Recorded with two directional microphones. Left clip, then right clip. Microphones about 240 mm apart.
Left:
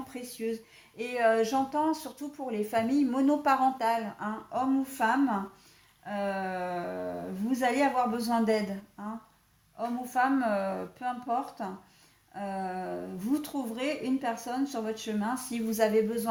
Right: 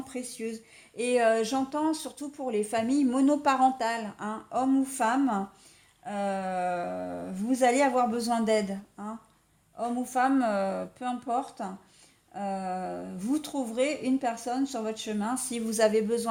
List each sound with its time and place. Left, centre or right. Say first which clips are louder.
0.1 s a woman's voice: left 2 dB; right
9.7 s a woman's voice: right 1 dB; right